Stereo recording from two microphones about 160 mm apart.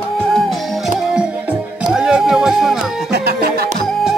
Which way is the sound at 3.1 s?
85° right.